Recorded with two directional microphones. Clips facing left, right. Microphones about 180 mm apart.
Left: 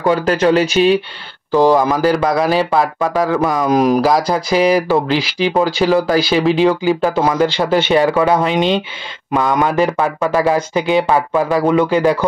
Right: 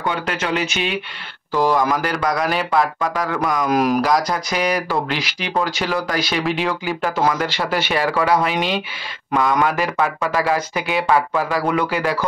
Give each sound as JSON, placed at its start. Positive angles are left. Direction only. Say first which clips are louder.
{"t": 0.3, "sound": "speech", "louder": "left 10 dB", "side_deg": 35}